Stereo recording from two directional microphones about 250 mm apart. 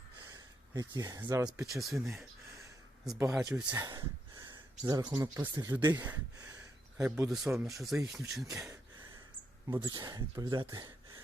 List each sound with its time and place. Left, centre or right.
0.3 s speech: centre
1.6 s speech: centre
7.0 s speech: centre
7.8 s speech: centre
9.6 s speech: centre